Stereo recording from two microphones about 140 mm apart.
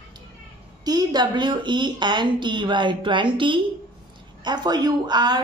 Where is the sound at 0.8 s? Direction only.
30° right (ahead or behind).